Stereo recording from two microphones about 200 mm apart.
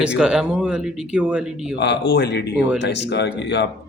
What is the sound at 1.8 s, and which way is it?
Speech, 60° left (ahead or behind).